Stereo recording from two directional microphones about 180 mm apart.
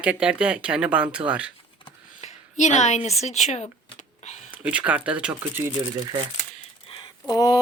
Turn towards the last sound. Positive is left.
turn(degrees=20)  # may be behind; listen again after turning